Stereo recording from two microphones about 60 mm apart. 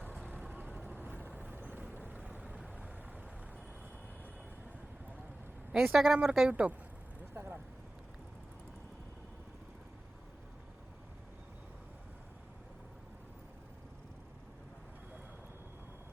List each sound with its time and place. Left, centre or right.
0.3 s vehicle: right
5.7 s speech: centre
6.5 s speech: right
7.3 s vehicle: right